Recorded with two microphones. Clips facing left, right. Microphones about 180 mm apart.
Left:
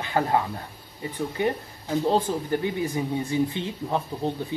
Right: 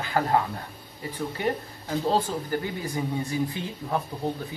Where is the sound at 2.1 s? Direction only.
20° left (ahead or behind).